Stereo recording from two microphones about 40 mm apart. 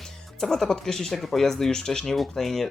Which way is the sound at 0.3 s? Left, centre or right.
Centre.